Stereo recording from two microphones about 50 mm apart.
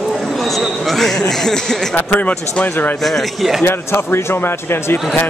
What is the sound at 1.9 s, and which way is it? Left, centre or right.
Speech, left.